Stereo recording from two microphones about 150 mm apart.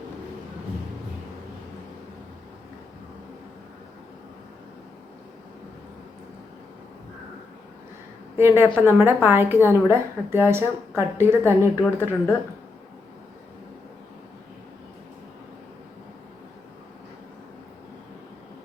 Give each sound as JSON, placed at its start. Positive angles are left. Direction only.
{"t": 8.4, "sound": "a woman's voice", "side_deg": -15}
{"t": 11.6, "sound": "speech", "side_deg": 15}